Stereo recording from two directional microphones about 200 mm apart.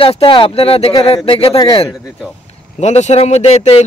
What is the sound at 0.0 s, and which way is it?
A man's voice, 25° left (ahead or behind).